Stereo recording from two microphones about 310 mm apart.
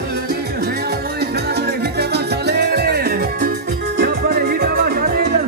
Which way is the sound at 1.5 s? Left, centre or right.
Right.